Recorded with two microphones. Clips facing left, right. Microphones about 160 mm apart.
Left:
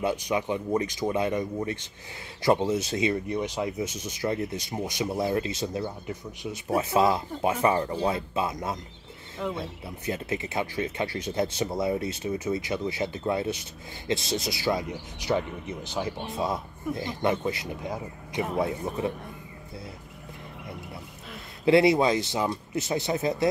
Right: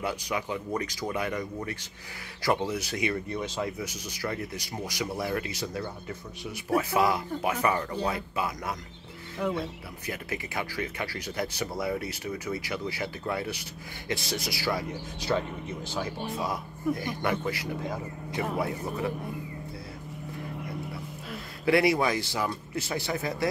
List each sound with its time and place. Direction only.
0.0 s speech: 20° left (ahead or behind)
21.6 s speech: 20° left (ahead or behind)